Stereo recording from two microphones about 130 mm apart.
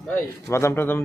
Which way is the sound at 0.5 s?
20° left (ahead or behind).